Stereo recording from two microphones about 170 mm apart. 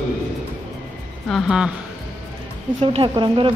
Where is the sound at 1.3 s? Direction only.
Centre (ahead or behind).